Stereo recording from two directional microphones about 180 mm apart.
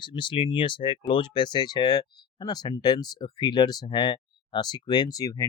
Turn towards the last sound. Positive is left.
turn(degrees=20)  # may be behind; listen again after turning